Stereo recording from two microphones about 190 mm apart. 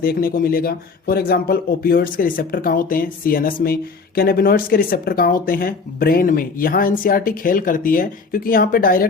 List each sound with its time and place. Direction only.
0.0 s speech: 50° left (ahead or behind)